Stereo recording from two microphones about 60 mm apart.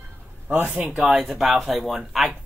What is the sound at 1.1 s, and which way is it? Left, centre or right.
Speech, centre.